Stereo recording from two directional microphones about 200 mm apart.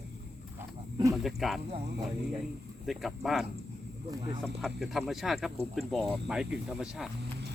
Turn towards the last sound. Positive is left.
turn(degrees=-5)  # may be behind; listen again after turning